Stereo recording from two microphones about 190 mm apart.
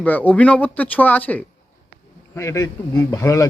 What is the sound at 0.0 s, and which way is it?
A man's voice, 10° left (ahead or behind).